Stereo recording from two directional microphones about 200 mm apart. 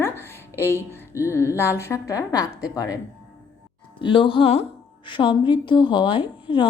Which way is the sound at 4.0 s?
25° left (ahead or behind).